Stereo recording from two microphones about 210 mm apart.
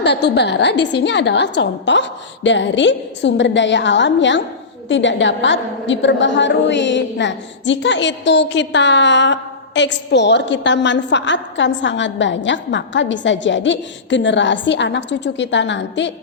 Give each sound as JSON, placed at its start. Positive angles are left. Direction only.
{"t": 0.0, "sound": "a woman's voice", "side_deg": 55}